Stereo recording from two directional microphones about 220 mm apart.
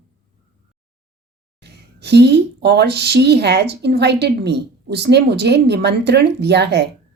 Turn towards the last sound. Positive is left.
turn(degrees=-50)  # may be behind; listen again after turning